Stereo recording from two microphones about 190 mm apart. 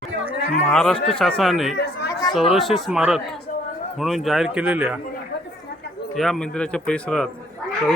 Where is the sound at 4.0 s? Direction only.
Centre (ahead or behind).